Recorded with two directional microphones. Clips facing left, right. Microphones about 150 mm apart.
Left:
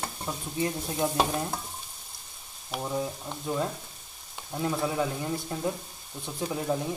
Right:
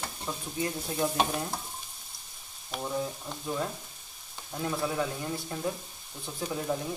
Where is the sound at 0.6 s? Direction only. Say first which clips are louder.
Left 2 dB; 25° left (ahead or behind).